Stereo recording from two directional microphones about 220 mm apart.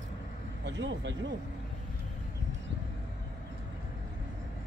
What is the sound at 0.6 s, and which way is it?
Speech, 55° right (ahead or behind).